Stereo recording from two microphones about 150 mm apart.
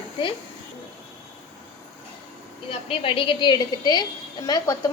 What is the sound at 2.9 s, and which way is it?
A woman's voice, 35° left (ahead or behind).